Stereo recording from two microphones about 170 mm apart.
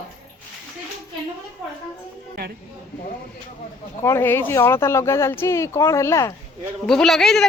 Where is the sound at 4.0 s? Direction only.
15° left (ahead or behind).